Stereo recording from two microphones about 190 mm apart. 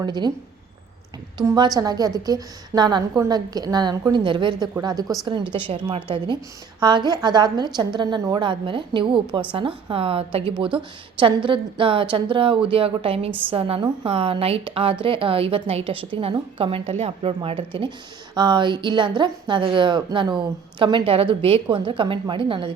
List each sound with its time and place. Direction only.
0.0 s a woman's voice: 20° right (ahead or behind)
1.4 s a woman's voice: 20° right (ahead or behind)